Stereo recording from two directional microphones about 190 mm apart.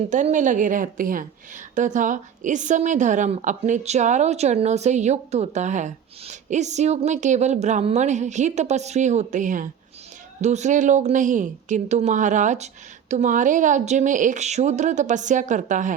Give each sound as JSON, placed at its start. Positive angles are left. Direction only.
{"t": 0.1, "sound": "a woman's voice", "side_deg": -40}